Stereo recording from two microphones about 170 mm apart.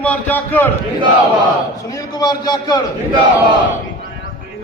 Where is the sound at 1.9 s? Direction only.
20° left (ahead or behind).